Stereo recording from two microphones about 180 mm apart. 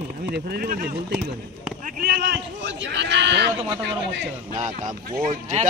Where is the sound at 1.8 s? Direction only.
50° right (ahead or behind).